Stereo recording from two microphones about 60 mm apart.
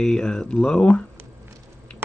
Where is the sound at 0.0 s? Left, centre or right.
Centre.